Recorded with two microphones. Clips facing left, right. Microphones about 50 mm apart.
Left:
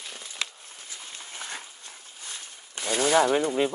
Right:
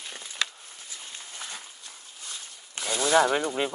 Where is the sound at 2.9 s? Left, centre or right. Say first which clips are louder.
Left 2 dB; left.